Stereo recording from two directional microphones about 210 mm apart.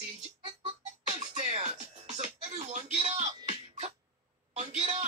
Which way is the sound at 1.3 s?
30° right (ahead or behind).